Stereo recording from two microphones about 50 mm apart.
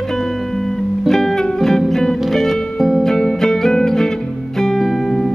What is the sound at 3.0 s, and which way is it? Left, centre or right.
Music, centre.